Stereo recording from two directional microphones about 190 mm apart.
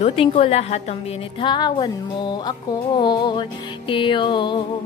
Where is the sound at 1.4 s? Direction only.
25° left (ahead or behind).